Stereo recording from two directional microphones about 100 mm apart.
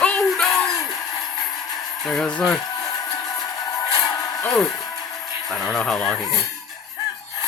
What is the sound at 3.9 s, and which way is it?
Music, 35° left (ahead or behind).